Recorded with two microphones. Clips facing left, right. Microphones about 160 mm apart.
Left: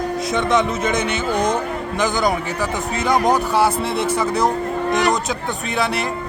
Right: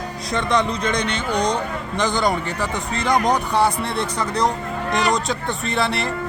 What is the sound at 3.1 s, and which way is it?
Speech, centre (ahead or behind).